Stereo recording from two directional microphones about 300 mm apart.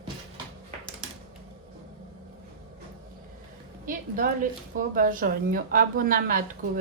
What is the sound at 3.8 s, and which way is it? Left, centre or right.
Music, right.